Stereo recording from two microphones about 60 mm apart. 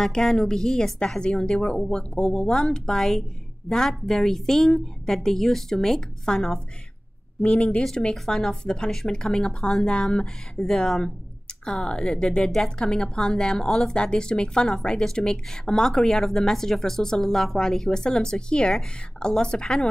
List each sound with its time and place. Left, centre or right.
0.0 s a woman's voice: centre